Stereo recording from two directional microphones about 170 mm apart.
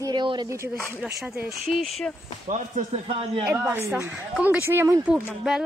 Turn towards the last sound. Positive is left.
turn(degrees=-5)  # may be behind; listen again after turning